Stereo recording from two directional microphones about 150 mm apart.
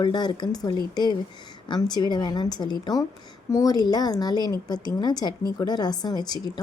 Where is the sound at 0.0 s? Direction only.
30° left (ahead or behind).